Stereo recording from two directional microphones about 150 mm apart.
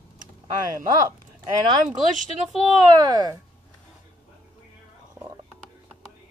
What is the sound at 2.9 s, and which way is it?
Speech, 30° right (ahead or behind).